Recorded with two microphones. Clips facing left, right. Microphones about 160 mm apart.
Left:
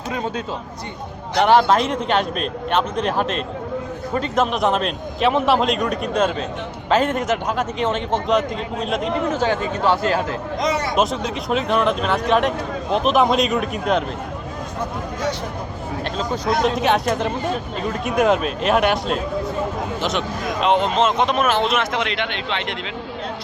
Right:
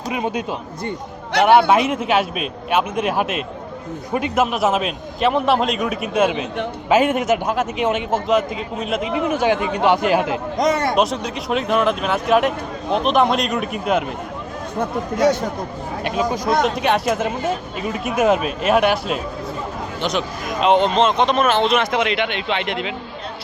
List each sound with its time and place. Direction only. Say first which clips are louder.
0.1 s a man's voice: right 2 dB; 15° right (ahead or behind)
10.6 s a man's voice: right 4 dB; 50° right (ahead or behind)
10.9 s speech: right 1 dB; centre (ahead or behind)
16.0 s a man's voice: right 4 dB; 10° right (ahead or behind)
16.6 s speech: even; centre (ahead or behind)